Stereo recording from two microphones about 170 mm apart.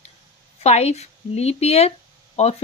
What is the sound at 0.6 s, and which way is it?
Speech, 40° left (ahead or behind).